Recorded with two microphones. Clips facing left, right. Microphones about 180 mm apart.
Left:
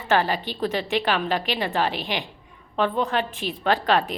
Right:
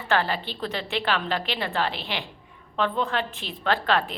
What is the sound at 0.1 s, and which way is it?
A woman's voice, 15° left (ahead or behind).